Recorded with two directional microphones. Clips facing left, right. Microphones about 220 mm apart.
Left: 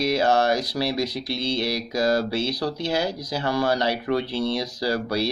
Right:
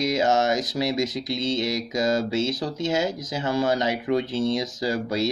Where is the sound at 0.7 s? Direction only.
20° right (ahead or behind).